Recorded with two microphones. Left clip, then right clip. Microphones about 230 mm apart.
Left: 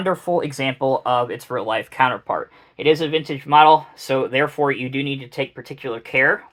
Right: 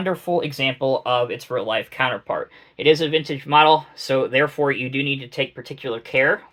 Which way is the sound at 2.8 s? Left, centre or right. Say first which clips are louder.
Right 1 dB; centre.